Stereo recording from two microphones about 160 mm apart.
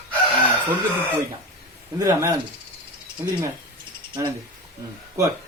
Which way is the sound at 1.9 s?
25° right (ahead or behind).